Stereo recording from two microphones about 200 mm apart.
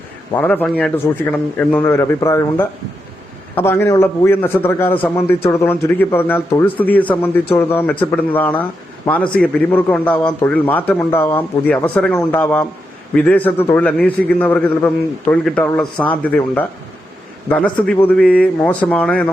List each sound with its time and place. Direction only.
0.3 s a man's voice: 5° left (ahead or behind)